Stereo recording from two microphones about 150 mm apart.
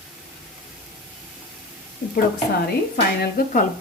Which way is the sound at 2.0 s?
65° left (ahead or behind).